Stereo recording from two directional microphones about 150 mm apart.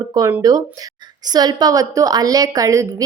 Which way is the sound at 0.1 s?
25° right (ahead or behind).